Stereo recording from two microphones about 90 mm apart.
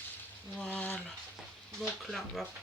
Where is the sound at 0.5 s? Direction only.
15° left (ahead or behind).